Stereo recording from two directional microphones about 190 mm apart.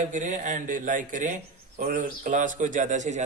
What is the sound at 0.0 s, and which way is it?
Speech, 40° right (ahead or behind).